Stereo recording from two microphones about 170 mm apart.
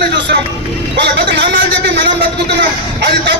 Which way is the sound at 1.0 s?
90° right.